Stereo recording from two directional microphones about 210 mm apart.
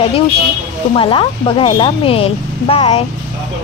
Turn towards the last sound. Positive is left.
turn(degrees=30)  # may be behind; listen again after turning